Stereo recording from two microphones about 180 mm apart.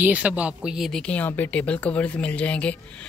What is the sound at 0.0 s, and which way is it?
Speech, 10° right (ahead or behind).